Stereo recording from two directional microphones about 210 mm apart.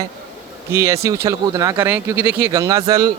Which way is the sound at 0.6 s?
15° right (ahead or behind).